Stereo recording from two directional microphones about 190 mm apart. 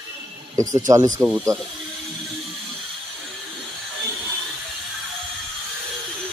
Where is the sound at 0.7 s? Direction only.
15° right (ahead or behind).